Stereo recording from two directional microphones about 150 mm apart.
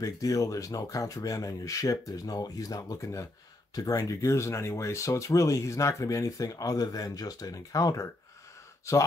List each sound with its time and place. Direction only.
0.0 s speech: 20° left (ahead or behind)